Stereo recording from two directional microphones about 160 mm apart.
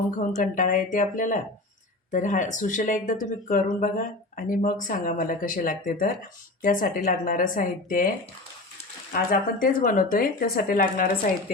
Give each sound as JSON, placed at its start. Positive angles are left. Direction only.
{"t": 0.2, "sound": "speech", "side_deg": 55}
{"t": 9.1, "sound": "speech", "side_deg": 60}